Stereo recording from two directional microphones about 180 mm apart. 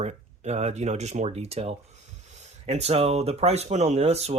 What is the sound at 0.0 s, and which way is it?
Speech, 40° right (ahead or behind).